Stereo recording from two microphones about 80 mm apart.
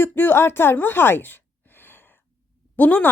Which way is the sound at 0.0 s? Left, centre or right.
Left.